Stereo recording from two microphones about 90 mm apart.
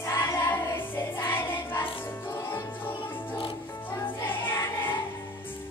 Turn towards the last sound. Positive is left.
turn(degrees=25)  # may be behind; listen again after turning